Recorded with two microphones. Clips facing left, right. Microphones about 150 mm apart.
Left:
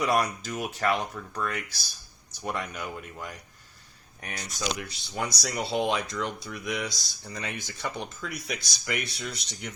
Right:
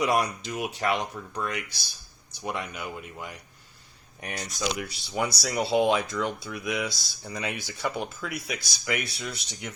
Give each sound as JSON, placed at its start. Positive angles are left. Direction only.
{"t": 0.0, "sound": "speech", "side_deg": -10}
{"t": 4.2, "sound": "speech", "side_deg": -30}
{"t": 4.9, "sound": "speech", "side_deg": -10}